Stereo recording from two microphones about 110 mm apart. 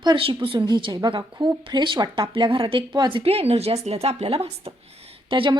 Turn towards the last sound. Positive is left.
turn(degrees=-50)  # may be behind; listen again after turning